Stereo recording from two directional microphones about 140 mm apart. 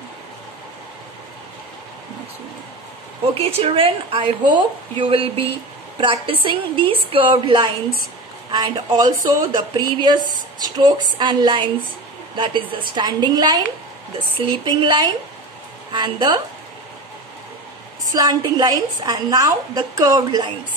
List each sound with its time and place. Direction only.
3.3 s speech: 45° right (ahead or behind)
18.1 s speech: 30° right (ahead or behind)